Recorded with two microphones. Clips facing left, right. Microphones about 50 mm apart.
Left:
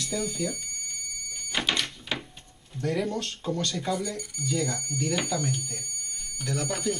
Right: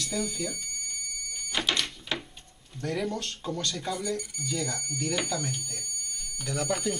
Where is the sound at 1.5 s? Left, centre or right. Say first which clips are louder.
Left 1 dB; centre.